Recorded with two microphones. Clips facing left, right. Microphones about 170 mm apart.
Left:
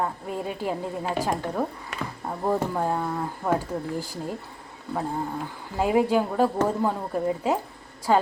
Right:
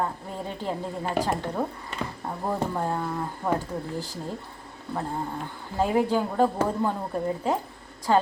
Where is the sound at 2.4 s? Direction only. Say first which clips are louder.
Left 3 dB; 10° left (ahead or behind).